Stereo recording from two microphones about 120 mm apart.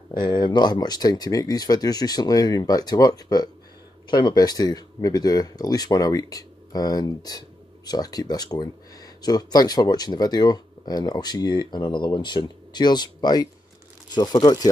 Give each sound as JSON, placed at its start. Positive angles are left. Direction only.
{"t": 0.1, "sound": "speech", "side_deg": 40}